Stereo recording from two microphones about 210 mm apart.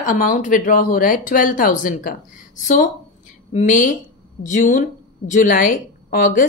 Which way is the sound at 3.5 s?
40° left (ahead or behind).